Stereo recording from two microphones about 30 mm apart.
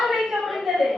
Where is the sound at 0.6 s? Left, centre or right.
Centre.